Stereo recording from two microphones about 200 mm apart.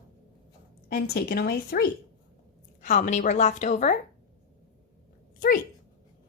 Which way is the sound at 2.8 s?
40° left (ahead or behind).